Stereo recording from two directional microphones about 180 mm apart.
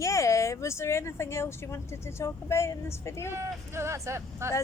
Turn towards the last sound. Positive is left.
turn(degrees=-15)  # may be behind; listen again after turning